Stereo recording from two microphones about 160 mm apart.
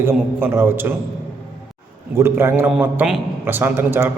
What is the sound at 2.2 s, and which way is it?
A man's voice, 15° right (ahead or behind).